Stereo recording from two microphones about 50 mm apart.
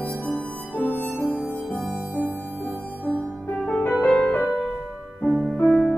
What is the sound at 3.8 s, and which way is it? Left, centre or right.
Music, left.